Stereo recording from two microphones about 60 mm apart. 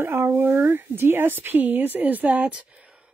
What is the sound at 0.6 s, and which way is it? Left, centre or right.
Speech, right.